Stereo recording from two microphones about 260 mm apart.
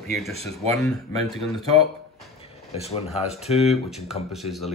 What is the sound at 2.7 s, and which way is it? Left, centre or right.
Speech, left.